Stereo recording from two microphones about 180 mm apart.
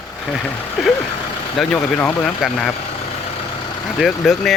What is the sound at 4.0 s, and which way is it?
Speech, centre (ahead or behind).